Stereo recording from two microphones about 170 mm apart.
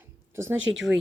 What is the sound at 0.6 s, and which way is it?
Speech, 90° right.